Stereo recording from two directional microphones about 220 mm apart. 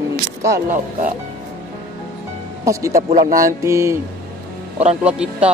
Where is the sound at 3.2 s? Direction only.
35° right (ahead or behind).